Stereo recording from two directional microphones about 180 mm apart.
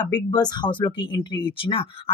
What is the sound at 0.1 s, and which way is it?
Speech, 25° left (ahead or behind).